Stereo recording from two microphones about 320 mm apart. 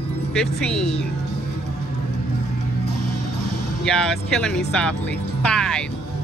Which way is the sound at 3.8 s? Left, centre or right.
Centre.